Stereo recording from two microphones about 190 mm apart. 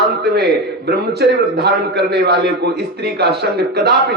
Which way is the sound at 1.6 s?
60° right (ahead or behind).